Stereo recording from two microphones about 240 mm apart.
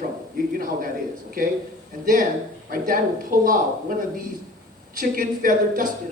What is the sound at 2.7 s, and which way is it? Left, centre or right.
Speech, right.